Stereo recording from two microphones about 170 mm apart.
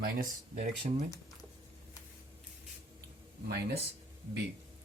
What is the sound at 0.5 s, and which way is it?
Speech, 40° right (ahead or behind).